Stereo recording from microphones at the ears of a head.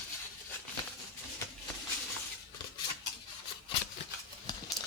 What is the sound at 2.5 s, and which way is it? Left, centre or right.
Scissors, left.